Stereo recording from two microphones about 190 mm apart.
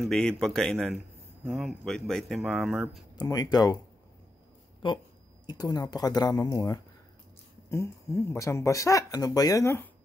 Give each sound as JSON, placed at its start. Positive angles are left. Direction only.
{"t": 0.0, "sound": "speech", "side_deg": 5}
{"t": 3.2, "sound": "speech", "side_deg": 20}
{"t": 4.8, "sound": "speech", "side_deg": 25}